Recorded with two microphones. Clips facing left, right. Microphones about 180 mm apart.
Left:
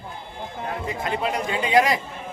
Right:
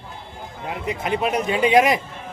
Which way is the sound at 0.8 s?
20° right (ahead or behind).